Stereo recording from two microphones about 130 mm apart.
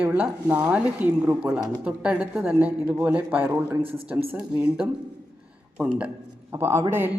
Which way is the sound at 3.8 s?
45° right (ahead or behind).